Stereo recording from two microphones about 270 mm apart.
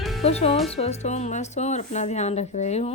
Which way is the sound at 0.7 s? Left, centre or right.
Left.